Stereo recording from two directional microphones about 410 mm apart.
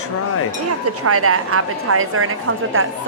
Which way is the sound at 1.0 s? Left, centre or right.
Right.